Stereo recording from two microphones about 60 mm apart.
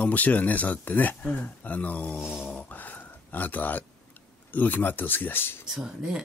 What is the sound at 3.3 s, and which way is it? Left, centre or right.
A man's voice, left.